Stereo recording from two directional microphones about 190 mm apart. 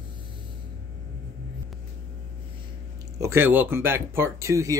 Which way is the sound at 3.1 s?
15° right (ahead or behind).